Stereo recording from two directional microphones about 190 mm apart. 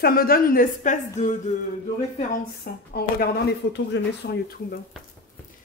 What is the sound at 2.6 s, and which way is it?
Speech, 55° left (ahead or behind).